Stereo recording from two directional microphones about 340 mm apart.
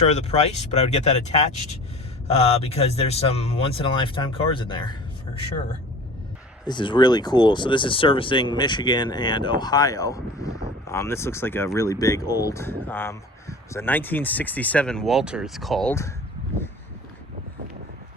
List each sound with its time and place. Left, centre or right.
0.0 s speech: centre
2.2 s speech: centre
6.7 s speech: centre